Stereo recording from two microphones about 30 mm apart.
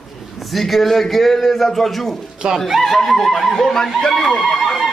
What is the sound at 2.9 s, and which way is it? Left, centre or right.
A man's voice, centre.